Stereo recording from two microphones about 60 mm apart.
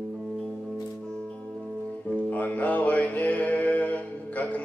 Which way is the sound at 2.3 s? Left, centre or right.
Left.